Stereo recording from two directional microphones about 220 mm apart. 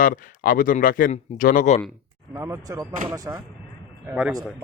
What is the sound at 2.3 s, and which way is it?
A man's voice, 10° right (ahead or behind).